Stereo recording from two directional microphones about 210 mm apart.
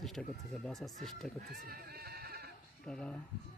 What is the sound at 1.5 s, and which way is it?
Neigh, 45° right (ahead or behind).